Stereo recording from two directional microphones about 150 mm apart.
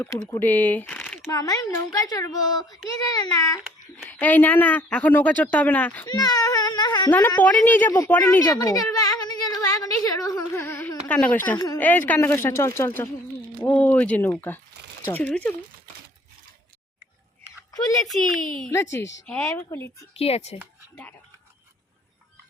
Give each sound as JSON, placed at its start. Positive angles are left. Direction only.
{"t": 0.3, "sound": "speech", "side_deg": 10}
{"t": 1.3, "sound": "a woman's voice", "side_deg": 25}
{"t": 4.0, "sound": "speech", "side_deg": 15}
{"t": 6.1, "sound": "speech", "side_deg": 25}
{"t": 7.1, "sound": "speech", "side_deg": 10}
{"t": 8.4, "sound": "a sound", "side_deg": 25}
{"t": 11.1, "sound": "speech", "side_deg": 10}
{"t": 11.5, "sound": "speech", "side_deg": 25}
{"t": 11.8, "sound": "speech", "side_deg": 10}
{"t": 17.7, "sound": "speech", "side_deg": 25}
{"t": 18.0, "sound": "speech", "side_deg": 0}
{"t": 18.7, "sound": "speech", "side_deg": 15}
{"t": 20.1, "sound": "speech", "side_deg": 40}
{"t": 20.9, "sound": "speech", "side_deg": 10}